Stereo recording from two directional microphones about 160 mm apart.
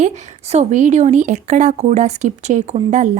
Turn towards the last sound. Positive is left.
turn(degrees=-50)  # may be behind; listen again after turning